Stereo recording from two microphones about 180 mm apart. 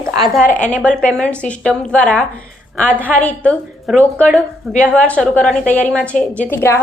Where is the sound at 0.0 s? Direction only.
20° right (ahead or behind).